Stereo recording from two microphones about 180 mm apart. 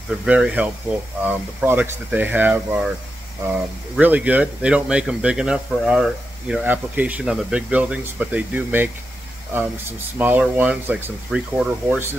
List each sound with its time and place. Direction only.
0.2 s speech: 5° right (ahead or behind)
3.9 s speech: 10° right (ahead or behind)